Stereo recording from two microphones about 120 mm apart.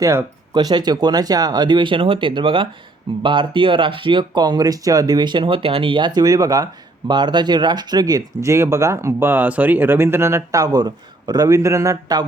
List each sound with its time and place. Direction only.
0.0 s speech: 20° right (ahead or behind)
0.5 s speech: 35° right (ahead or behind)